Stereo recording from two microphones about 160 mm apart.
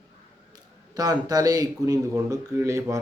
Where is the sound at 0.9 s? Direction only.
25° right (ahead or behind).